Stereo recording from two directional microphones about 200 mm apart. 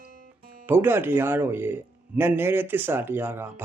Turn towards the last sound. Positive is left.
turn(degrees=-10)  # may be behind; listen again after turning